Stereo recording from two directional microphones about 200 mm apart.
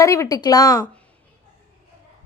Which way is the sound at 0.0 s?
15° left (ahead or behind).